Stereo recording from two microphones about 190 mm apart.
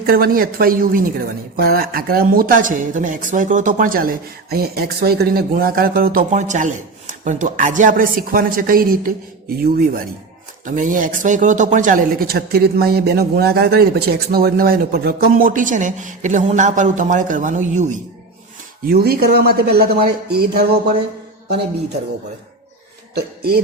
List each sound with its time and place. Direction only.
0.0 s speech: 50° right (ahead or behind)
10.7 s speech: 45° right (ahead or behind)
18.9 s speech: 55° right (ahead or behind)
23.1 s speech: 55° right (ahead or behind)